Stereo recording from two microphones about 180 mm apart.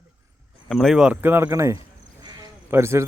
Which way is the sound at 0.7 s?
Centre (ahead or behind).